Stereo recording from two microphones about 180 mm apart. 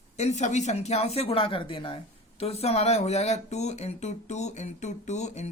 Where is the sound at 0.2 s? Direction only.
40° left (ahead or behind).